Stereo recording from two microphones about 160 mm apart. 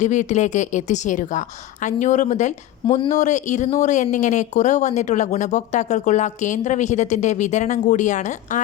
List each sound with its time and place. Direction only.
0.0 s speech: 50° left (ahead or behind)